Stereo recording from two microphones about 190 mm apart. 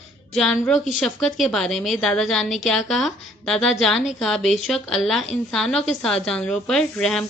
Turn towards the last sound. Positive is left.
turn(degrees=5)  # may be behind; listen again after turning